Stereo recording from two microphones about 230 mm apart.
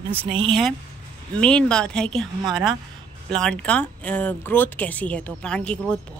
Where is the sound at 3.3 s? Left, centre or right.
Centre.